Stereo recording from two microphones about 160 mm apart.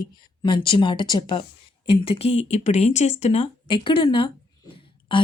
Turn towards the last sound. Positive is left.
turn(degrees=35)  # may be behind; listen again after turning